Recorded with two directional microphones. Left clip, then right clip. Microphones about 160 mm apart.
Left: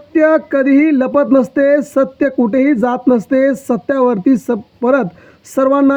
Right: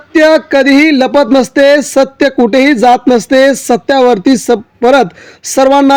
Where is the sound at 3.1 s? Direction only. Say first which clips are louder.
Right 6 dB; 20° right (ahead or behind).